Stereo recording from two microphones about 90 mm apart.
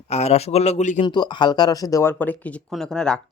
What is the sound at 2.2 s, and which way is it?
Speech, 15° left (ahead or behind).